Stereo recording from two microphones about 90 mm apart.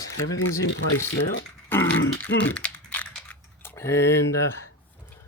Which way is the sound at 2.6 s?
15° left (ahead or behind).